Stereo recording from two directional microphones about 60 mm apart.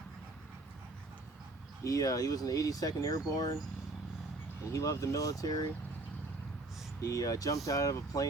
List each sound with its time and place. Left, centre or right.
1.8 s speech: left
4.7 s speech: left
7.0 s speech: left